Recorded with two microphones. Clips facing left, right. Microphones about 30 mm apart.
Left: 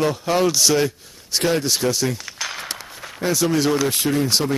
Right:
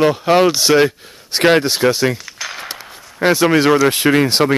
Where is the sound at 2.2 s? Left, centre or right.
Centre.